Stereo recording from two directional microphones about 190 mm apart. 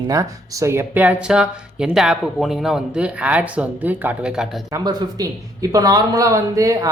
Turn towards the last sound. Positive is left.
turn(degrees=-15)  # may be behind; listen again after turning